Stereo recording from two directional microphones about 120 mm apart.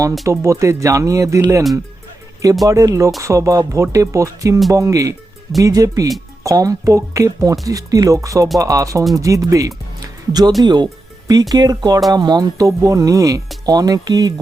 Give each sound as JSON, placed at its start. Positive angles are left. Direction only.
{"t": 0.3, "sound": "speech", "side_deg": -25}
{"t": 2.6, "sound": "speech", "side_deg": -30}